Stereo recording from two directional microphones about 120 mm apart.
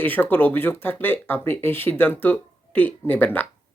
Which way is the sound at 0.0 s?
15° left (ahead or behind).